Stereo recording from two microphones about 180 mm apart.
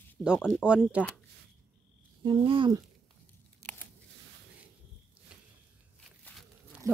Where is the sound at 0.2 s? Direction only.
5° right (ahead or behind).